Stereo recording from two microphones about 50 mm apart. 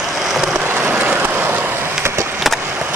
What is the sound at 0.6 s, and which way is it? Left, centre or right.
Vehicle, right.